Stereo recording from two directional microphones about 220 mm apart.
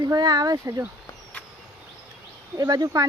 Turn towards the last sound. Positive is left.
turn(degrees=-15)  # may be behind; listen again after turning